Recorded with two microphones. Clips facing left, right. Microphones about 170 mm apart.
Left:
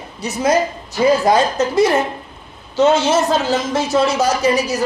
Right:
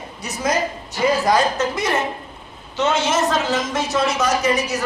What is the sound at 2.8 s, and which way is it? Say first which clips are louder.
A man's voice: left 6 dB; 30° left (ahead or behind).